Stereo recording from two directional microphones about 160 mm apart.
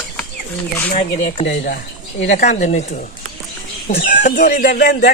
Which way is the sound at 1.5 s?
70° left (ahead or behind).